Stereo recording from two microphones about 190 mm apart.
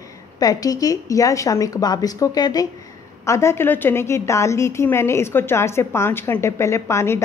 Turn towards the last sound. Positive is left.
turn(degrees=15)  # may be behind; listen again after turning